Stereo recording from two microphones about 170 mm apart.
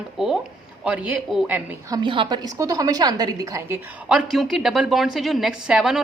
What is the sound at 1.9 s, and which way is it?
A woman's voice, 30° right (ahead or behind).